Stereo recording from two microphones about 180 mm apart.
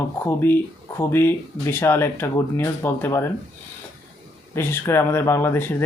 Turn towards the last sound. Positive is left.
turn(degrees=10)  # may be behind; listen again after turning